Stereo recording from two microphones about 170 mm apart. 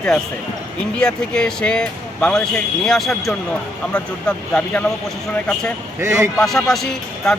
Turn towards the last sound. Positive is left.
turn(degrees=0)  # may be behind; listen again after turning